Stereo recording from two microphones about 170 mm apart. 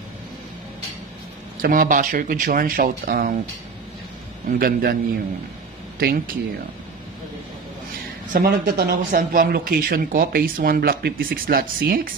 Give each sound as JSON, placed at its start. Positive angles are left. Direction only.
{"t": 1.6, "sound": "speech", "side_deg": -55}
{"t": 4.5, "sound": "speech", "side_deg": -60}
{"t": 5.9, "sound": "speech", "side_deg": -60}
{"t": 8.3, "sound": "speech", "side_deg": -55}